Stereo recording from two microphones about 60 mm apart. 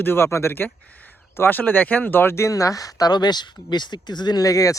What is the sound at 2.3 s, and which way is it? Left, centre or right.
Speech, left.